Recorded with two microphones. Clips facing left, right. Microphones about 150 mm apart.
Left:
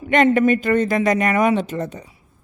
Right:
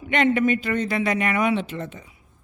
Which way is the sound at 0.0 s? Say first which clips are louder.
Left 5 dB; 45° left (ahead or behind).